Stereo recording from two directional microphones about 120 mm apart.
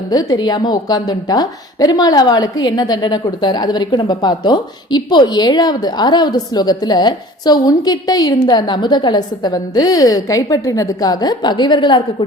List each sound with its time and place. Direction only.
0.1 s a woman's voice: 30° left (ahead or behind)